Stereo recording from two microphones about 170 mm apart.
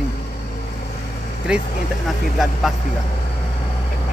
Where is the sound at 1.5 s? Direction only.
5° right (ahead or behind).